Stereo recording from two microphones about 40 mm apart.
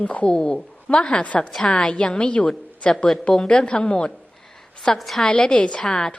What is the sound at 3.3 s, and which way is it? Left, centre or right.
Speech, centre.